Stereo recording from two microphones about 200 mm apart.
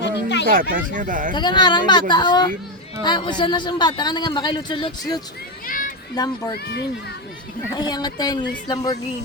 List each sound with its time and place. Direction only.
0.0 s a sound: 60° left (ahead or behind)
0.5 s speech: 45° right (ahead or behind)
1.4 s a man's voice: 20° left (ahead or behind)
5.6 s children playing: 45° left (ahead or behind)
6.1 s a man's voice: 20° left (ahead or behind)
7.8 s a man's voice: 20° left (ahead or behind)